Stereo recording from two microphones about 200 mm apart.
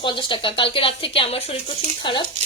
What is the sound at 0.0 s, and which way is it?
A woman's voice, 25° left (ahead or behind).